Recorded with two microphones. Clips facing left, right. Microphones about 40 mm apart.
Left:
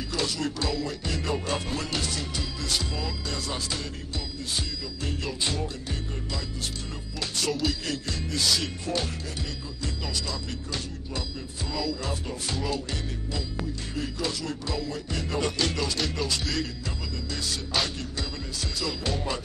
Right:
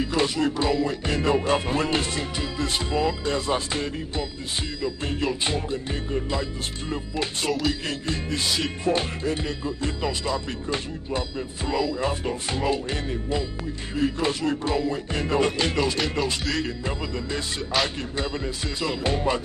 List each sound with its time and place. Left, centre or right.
0.0 s music: right
17.7 s music: centre
18.8 s music: right